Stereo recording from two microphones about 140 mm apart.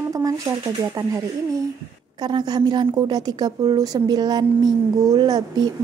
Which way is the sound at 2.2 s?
30° right (ahead or behind).